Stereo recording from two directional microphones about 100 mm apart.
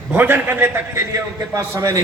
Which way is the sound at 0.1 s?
20° right (ahead or behind).